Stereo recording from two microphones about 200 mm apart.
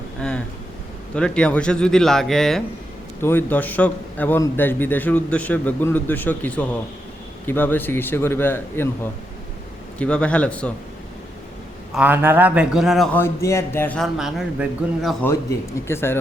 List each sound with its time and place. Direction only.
0.2 s a man's voice: 5° left (ahead or behind)
10.0 s a man's voice: 5° left (ahead or behind)
11.9 s a man's voice: 10° right (ahead or behind)
15.9 s a man's voice: 10° left (ahead or behind)